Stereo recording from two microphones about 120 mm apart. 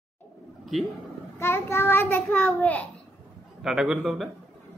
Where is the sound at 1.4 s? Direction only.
20° left (ahead or behind).